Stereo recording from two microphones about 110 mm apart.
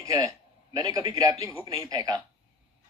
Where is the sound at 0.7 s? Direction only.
40° right (ahead or behind).